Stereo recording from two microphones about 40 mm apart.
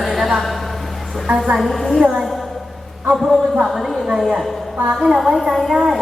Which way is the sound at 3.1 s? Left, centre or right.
Centre.